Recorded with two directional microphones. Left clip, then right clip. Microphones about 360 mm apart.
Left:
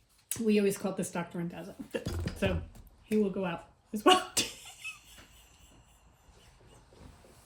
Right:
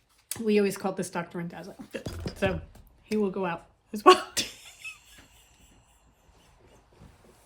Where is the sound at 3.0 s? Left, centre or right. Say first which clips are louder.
Right 3 dB; centre.